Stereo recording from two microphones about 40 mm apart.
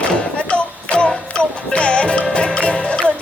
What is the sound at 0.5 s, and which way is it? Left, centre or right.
Music, left.